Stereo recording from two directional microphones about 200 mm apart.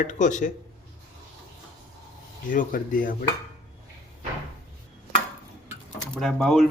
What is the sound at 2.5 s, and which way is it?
Speech, 40° left (ahead or behind).